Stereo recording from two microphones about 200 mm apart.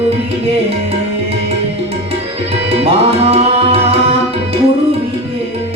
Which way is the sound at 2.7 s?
30° right (ahead or behind).